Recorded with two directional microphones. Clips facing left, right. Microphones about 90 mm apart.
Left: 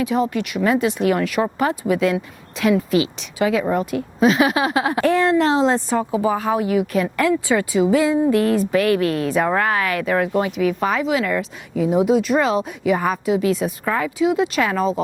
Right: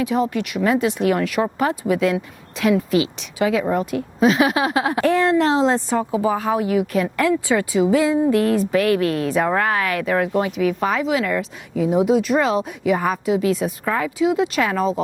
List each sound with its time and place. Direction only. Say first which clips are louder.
0.0 s speech: even; 20° left (ahead or behind)